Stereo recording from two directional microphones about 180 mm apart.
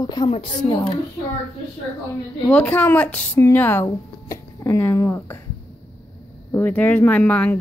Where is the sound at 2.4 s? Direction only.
10° left (ahead or behind).